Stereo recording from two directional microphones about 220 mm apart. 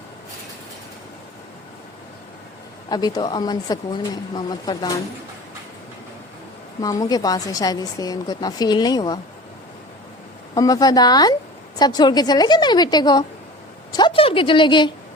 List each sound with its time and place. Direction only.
2.9 s speech: 20° left (ahead or behind)
6.8 s a woman's voice: 15° left (ahead or behind)
10.5 s a woman's voice: 15° left (ahead or behind)